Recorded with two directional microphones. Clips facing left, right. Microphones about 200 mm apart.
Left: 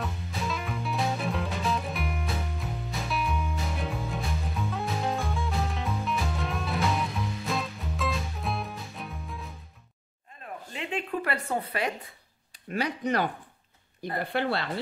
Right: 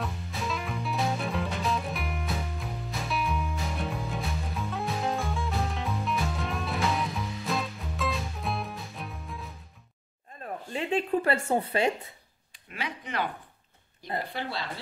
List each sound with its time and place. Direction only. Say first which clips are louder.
0.0 s music: left 1 dB; centre (ahead or behind)
10.4 s a sound: right 4 dB; 35° right (ahead or behind)
12.5 s speech: left 7 dB; 40° left (ahead or behind)
14.3 s speech: left 6 dB; 60° left (ahead or behind)